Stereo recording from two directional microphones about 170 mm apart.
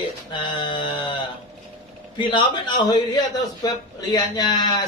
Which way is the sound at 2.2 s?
25° left (ahead or behind).